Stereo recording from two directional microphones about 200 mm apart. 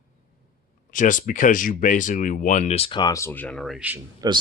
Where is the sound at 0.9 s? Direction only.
40° left (ahead or behind); by 4.0 s 5° right (ahead or behind).